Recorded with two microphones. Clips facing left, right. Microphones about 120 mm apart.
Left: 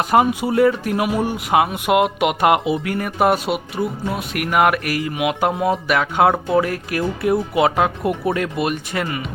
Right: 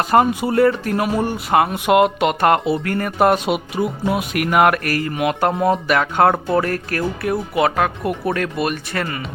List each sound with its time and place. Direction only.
0.1 s speech: 10° left (ahead or behind)
7.2 s speech: 20° left (ahead or behind)